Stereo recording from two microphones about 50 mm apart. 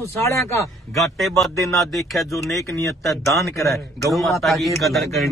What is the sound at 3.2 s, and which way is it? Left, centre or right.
Speech, left.